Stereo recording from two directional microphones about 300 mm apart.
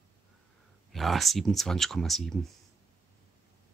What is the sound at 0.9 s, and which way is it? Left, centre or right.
Speech, centre.